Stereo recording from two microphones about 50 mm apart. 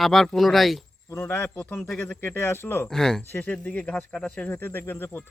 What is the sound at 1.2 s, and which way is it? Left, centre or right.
Speech, left.